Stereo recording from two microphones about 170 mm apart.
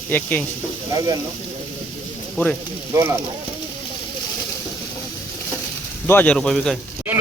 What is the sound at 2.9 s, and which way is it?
Speech, 15° right (ahead or behind).